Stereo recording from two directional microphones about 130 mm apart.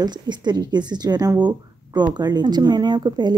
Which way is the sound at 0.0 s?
35° right (ahead or behind).